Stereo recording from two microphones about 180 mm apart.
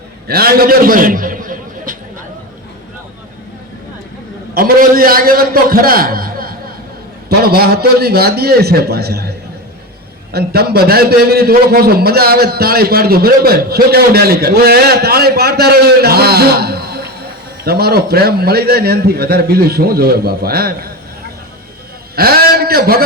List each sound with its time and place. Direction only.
0.3 s a sound: 55° right (ahead or behind)
4.5 s a man's voice: 55° right (ahead or behind)
10.3 s a man's voice: 60° right (ahead or behind)
22.1 s a man's voice: 60° right (ahead or behind)